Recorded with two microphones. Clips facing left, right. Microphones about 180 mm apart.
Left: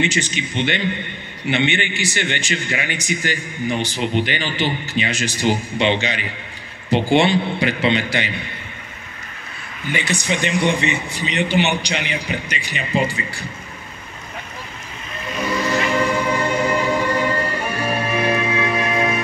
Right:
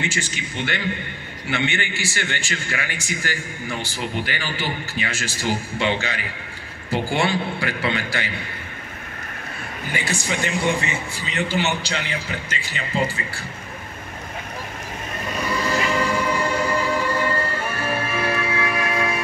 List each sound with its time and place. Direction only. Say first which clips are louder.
0.0 s a man's voice: left 6 dB; 20° left (ahead or behind)
9.9 s a man's voice: left 3 dB; 20° left (ahead or behind)
15.7 s train: left 3 dB; 20° left (ahead or behind)